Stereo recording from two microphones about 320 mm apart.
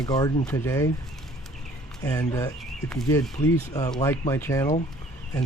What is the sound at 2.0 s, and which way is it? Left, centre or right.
Speech, centre.